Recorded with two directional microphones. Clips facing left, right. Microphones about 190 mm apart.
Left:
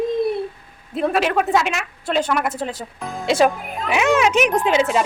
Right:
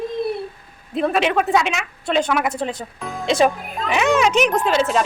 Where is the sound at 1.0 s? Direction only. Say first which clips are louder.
Even; 5° left (ahead or behind).